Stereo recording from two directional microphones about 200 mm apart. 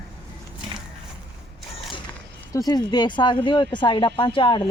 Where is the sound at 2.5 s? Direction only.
20° left (ahead or behind).